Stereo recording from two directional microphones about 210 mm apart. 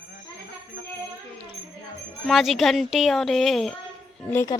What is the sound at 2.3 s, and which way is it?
A woman's voice, centre (ahead or behind).